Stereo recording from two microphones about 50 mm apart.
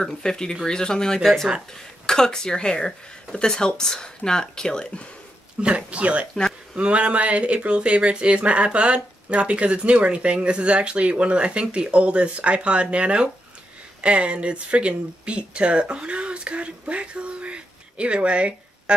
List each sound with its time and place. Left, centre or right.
0.0 s speech: centre
1.2 s speech: centre
5.6 s speech: right